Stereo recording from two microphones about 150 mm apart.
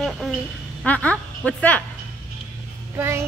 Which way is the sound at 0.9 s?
10° left (ahead or behind).